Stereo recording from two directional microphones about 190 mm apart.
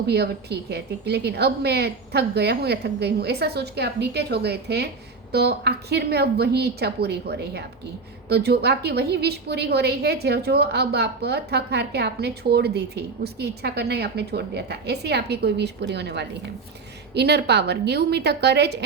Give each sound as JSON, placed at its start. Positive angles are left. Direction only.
{"t": 0.1, "sound": "a woman's voice", "side_deg": -60}